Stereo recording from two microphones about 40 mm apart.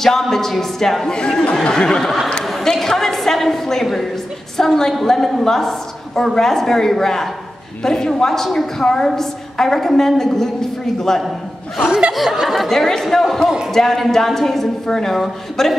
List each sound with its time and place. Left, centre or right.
0.0 s a woman's voice: centre
1.1 s speech: centre
2.4 s a sound: centre
4.6 s a woman's voice: centre
12.1 s a woman's voice: centre